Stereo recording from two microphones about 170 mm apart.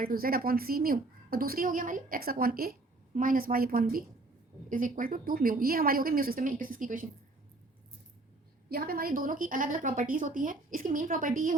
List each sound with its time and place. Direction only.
0.0 s a woman's voice: 60° right (ahead or behind)
8.7 s a woman's voice: 60° right (ahead or behind)